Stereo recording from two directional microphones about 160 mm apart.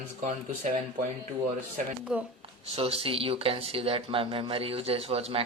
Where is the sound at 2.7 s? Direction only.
35° right (ahead or behind).